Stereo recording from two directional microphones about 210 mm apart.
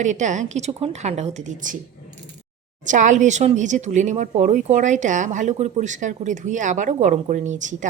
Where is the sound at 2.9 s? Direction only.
35° right (ahead or behind).